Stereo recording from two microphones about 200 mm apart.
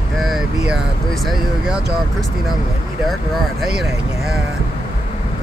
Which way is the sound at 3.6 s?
Centre (ahead or behind).